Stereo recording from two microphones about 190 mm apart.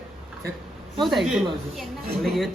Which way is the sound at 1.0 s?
Centre (ahead or behind).